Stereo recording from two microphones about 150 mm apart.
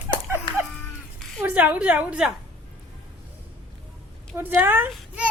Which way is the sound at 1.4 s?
10° right (ahead or behind).